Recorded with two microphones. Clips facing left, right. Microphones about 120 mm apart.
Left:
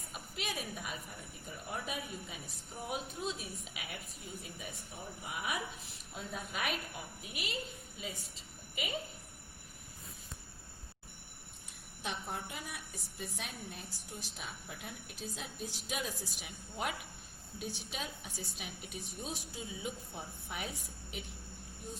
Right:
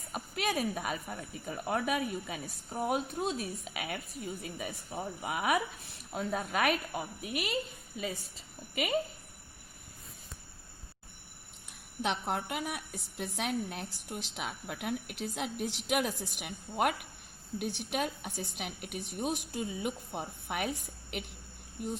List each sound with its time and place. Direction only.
0.1 s a woman's voice: 50° right (ahead or behind); by 2.4 s 65° right (ahead or behind)
2.7 s a woman's voice: 50° right (ahead or behind)
3.3 s a woman's voice: centre (ahead or behind)
3.8 s a woman's voice: 60° right (ahead or behind)
4.5 s a woman's voice: 70° right (ahead or behind)
12.0 s a woman's voice: 70° right (ahead or behind)